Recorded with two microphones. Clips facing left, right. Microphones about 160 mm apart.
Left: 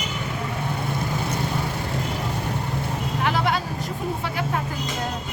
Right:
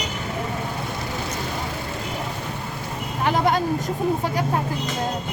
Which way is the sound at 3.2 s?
40° right (ahead or behind).